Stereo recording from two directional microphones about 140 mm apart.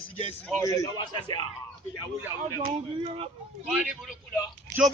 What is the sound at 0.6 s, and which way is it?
Speech, 25° left (ahead or behind).